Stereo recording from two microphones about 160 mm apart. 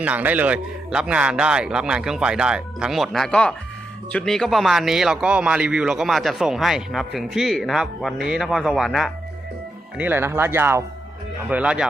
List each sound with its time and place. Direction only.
0.0 s speech: 10° right (ahead or behind)
10.0 s speech: 15° right (ahead or behind)